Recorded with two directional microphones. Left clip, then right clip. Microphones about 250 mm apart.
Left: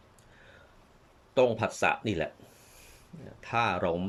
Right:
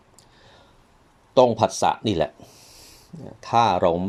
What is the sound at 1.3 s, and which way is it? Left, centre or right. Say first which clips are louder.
Speech: right 9 dB; centre.